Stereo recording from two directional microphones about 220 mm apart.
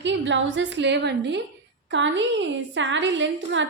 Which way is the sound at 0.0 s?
55° right (ahead or behind).